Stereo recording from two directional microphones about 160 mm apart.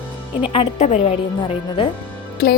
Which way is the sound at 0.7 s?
45° left (ahead or behind).